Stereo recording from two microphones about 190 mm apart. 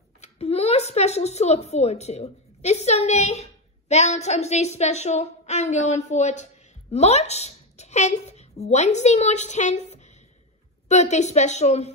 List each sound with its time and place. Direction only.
0.2 s a woman's voice: 35° left (ahead or behind)